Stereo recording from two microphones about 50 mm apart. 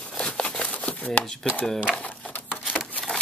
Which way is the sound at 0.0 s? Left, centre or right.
Left.